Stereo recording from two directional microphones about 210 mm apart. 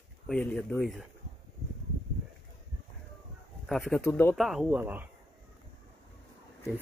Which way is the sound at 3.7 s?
Centre (ahead or behind).